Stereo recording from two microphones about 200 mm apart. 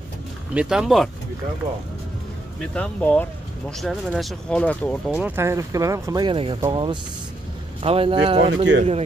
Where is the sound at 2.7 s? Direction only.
5° left (ahead or behind).